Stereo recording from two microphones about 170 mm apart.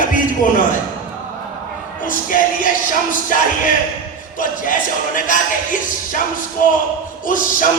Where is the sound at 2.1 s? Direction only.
50° left (ahead or behind).